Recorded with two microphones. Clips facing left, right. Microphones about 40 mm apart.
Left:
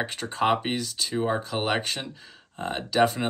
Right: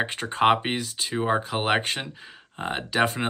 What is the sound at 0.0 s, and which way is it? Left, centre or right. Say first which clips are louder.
Speech: right 4 dB; right.